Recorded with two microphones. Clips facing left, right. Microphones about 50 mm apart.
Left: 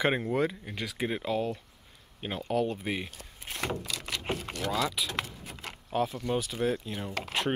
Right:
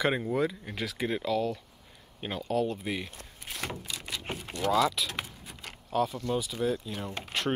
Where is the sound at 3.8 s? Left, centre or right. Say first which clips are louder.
Left 2 dB; left.